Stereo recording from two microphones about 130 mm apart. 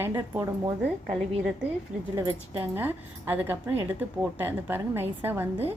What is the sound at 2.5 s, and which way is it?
A woman's voice, 15° right (ahead or behind).